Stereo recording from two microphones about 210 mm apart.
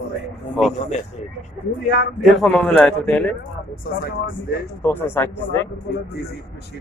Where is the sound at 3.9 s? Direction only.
45° left (ahead or behind).